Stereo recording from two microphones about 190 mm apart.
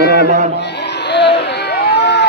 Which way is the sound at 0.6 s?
65° left (ahead or behind).